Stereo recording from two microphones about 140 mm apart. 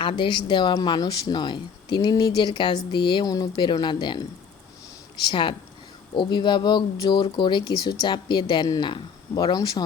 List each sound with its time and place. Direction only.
0.0 s speech: 35° left (ahead or behind)
5.3 s speech: 35° left (ahead or behind)